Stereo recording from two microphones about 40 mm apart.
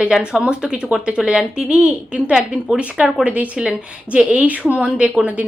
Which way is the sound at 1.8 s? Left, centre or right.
Right.